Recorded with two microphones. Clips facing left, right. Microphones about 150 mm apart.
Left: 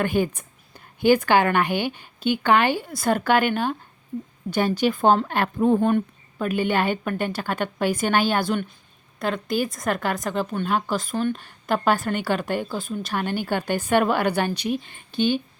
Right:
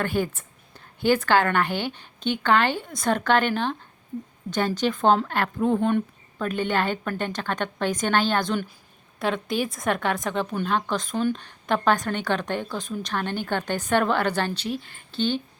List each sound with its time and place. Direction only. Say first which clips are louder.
0.0 s a woman's voice: left 3 dB; 15° left (ahead or behind)